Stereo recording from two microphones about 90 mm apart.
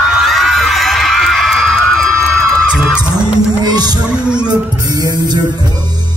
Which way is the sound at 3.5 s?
50° right (ahead or behind).